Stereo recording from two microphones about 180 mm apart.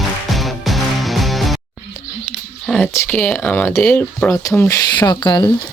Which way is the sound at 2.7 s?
5° left (ahead or behind).